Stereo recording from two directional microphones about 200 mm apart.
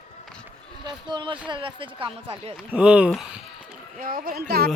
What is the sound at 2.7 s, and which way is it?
Speech, 5° right (ahead or behind).